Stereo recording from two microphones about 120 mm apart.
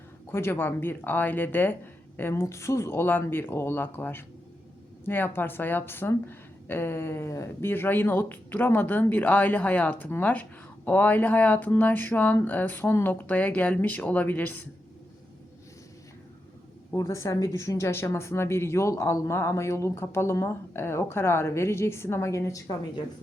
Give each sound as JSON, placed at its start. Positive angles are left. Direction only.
{"t": 0.3, "sound": "a woman's voice", "side_deg": 20}
{"t": 16.9, "sound": "speech", "side_deg": 25}